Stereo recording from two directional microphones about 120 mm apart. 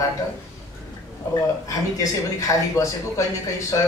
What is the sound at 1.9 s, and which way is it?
Speech, 30° left (ahead or behind).